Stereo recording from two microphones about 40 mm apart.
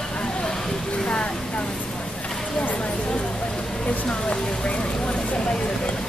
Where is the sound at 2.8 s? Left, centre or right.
Left.